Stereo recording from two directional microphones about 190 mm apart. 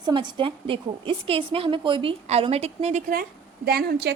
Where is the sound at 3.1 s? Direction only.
55° right (ahead or behind).